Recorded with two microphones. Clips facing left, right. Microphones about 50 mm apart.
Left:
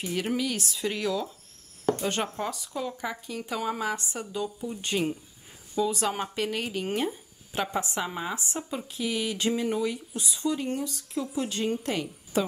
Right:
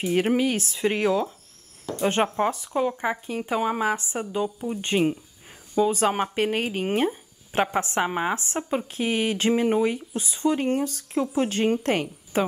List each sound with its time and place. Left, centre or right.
0.0 s speech: right